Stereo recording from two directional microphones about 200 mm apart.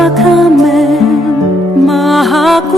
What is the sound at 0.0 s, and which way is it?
Music, centre (ahead or behind).